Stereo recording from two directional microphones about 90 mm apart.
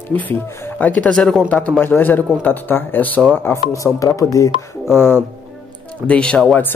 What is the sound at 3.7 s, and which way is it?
Speech, 35° left (ahead or behind).